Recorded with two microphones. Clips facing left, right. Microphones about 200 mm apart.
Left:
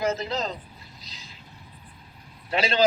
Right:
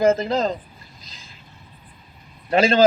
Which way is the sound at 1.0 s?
50° right (ahead or behind).